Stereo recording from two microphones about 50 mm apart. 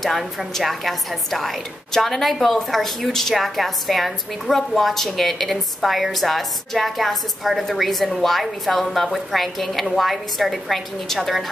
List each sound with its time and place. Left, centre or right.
0.0 s a woman's voice: centre